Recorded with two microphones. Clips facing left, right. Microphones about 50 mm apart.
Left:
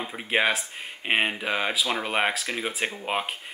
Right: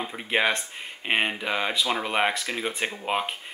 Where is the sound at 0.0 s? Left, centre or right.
Centre.